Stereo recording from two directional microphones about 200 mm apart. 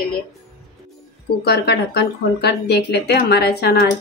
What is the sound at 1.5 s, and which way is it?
Speech, 55° left (ahead or behind).